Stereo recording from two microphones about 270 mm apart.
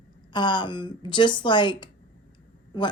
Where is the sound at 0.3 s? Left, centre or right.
Centre.